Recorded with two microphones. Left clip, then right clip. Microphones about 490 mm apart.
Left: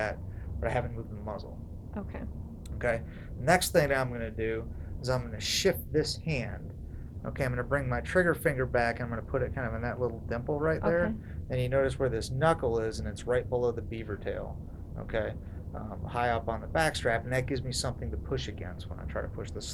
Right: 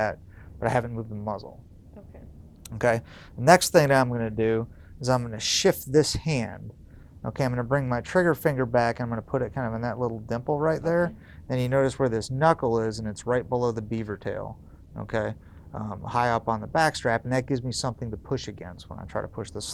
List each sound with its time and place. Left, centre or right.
0.6 s a man's voice: right
2.6 s a sound: right
3.4 s a man's voice: right
7.3 s a man's voice: right